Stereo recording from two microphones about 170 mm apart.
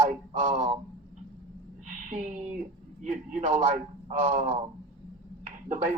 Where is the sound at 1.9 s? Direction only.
45° right (ahead or behind).